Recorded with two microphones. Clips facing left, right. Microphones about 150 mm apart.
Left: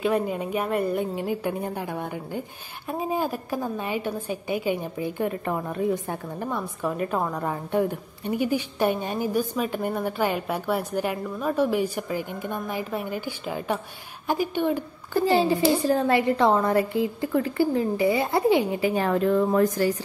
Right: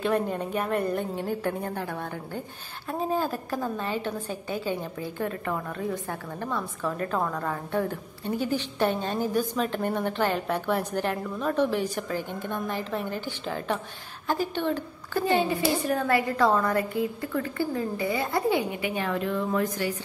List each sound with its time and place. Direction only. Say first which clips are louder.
0.0 s a woman's voice: left 2 dB; 10° left (ahead or behind)
15.2 s a woman's voice: left 4 dB; 30° left (ahead or behind)
18.8 s a woman's voice: left 6 dB; 35° left (ahead or behind)